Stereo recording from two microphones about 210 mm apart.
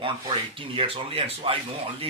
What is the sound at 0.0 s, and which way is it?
A man's voice, 25° right (ahead or behind).